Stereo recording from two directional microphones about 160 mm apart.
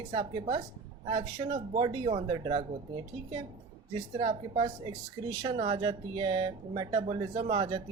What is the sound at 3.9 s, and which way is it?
Speech, 35° right (ahead or behind).